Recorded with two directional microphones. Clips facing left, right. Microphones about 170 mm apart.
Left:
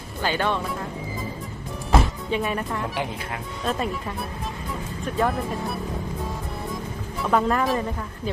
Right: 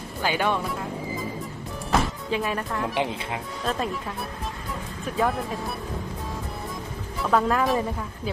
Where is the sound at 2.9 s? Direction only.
20° right (ahead or behind).